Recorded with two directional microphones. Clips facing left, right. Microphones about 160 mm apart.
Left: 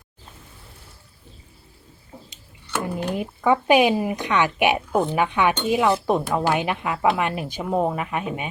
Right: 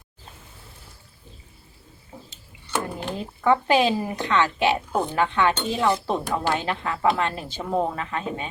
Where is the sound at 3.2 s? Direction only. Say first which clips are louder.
Even; 15° left (ahead or behind).